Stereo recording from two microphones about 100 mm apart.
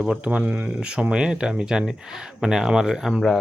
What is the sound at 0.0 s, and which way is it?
Speech, 10° right (ahead or behind).